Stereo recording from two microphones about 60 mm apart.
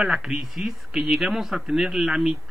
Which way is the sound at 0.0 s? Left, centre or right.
Centre.